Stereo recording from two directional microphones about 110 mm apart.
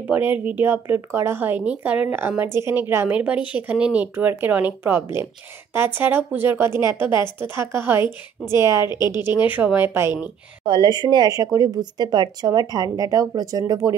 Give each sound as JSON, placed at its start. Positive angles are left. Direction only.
{"t": 0.1, "sound": "speech", "side_deg": -15}
{"t": 8.8, "sound": "a woman's voice", "side_deg": 40}
{"t": 9.5, "sound": "speech", "side_deg": -15}
{"t": 10.6, "sound": "speech", "side_deg": -45}